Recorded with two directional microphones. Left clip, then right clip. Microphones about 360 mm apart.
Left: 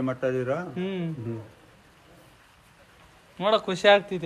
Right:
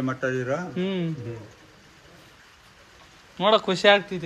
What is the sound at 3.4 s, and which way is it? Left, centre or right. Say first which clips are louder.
Speech: right 3 dB; centre.